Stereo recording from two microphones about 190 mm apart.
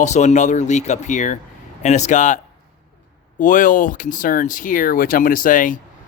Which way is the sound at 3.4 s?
45° left (ahead or behind).